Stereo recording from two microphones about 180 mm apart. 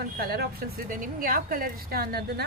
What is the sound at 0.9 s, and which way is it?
A woman's voice, 50° right (ahead or behind).